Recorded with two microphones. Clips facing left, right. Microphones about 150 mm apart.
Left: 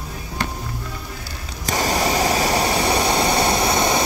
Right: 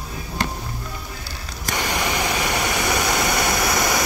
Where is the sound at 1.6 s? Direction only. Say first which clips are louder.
Left 4 dB; 35° left (ahead or behind).